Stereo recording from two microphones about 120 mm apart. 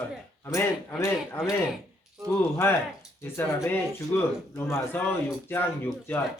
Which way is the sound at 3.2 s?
20° left (ahead or behind).